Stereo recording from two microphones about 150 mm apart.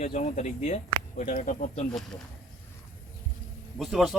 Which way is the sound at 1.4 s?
50° left (ahead or behind).